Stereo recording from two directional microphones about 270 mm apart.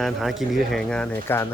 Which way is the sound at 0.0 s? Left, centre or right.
Centre.